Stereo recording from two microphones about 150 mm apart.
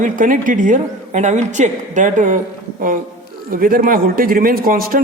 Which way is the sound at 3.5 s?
70° right (ahead or behind).